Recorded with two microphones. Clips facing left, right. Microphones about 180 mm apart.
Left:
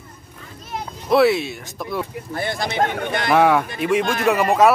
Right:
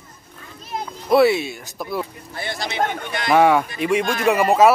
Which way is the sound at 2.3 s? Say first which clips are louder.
Left 4 dB; 50° left (ahead or behind).